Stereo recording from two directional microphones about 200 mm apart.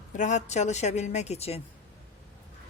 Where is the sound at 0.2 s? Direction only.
35° left (ahead or behind).